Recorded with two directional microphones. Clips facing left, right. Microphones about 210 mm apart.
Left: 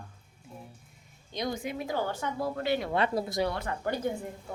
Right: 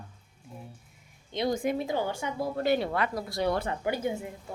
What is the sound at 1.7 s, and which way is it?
Speech, 25° right (ahead or behind).